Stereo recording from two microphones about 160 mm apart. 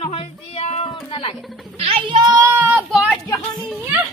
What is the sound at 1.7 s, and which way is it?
Speech, 35° right (ahead or behind).